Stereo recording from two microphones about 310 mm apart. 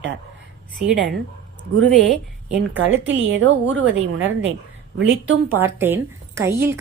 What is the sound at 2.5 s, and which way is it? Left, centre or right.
Speech, centre.